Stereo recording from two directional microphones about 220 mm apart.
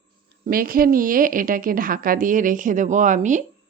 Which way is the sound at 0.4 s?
40° right (ahead or behind).